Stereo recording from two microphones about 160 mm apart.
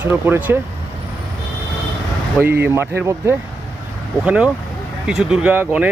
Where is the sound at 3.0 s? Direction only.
15° right (ahead or behind).